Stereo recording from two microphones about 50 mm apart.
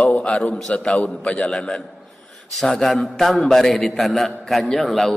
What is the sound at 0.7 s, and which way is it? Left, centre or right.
A man's voice, left.